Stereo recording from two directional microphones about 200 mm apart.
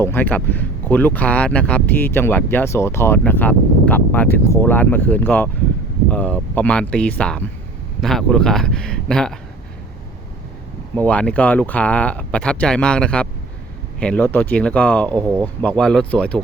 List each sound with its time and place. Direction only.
0.0 s speech: 10° left (ahead or behind)
10.9 s speech: 5° left (ahead or behind)
15.1 s speech: 15° right (ahead or behind)
15.6 s speech: 5° left (ahead or behind)